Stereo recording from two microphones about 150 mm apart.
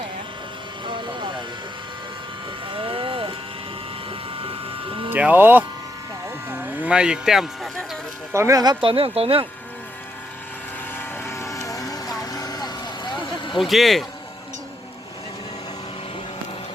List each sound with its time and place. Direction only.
0.9 s vehicle: 30° right (ahead or behind)
2.6 s vehicle: 35° right (ahead or behind)
5.1 s speech: 10° right (ahead or behind)
6.5 s a sound: 15° right (ahead or behind)
8.3 s speech: 20° right (ahead or behind); by 9.5 s 40° right (ahead or behind)
10.9 s vehicle: 15° left (ahead or behind)
13.2 s a sound: 30° left (ahead or behind)
13.6 s speech: centre (ahead or behind)